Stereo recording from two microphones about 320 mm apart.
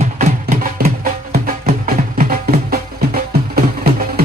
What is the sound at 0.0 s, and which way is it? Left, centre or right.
Music, right.